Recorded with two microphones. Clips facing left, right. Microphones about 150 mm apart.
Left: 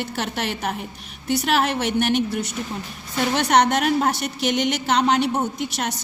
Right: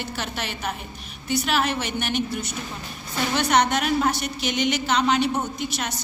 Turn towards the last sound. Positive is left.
turn(degrees=70)  # may be behind; listen again after turning